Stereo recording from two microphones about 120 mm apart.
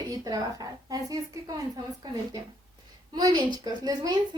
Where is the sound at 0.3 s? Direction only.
30° right (ahead or behind).